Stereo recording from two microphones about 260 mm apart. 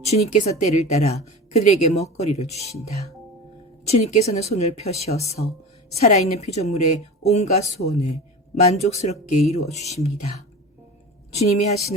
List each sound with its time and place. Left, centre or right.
0.0 s a woman's voice: left
3.8 s a woman's voice: left
11.3 s a woman's voice: left